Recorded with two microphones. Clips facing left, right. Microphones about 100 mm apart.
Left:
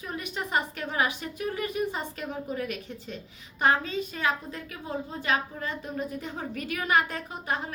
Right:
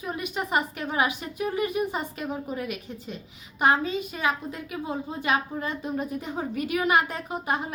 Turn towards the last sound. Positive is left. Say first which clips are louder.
# right 3 dB
turn(degrees=-20)  # may be behind; listen again after turning